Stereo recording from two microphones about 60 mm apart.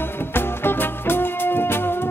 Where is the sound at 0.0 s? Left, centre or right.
Left.